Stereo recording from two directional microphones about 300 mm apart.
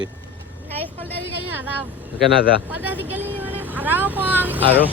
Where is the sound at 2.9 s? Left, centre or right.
Centre.